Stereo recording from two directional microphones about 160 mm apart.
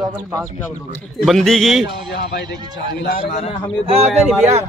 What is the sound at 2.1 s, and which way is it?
Speech, 90° left.